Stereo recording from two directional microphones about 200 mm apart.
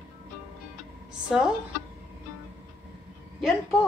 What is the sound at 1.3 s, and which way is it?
Speech, 5° right (ahead or behind).